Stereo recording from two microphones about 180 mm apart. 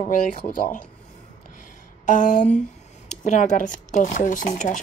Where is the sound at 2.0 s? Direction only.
45° left (ahead or behind).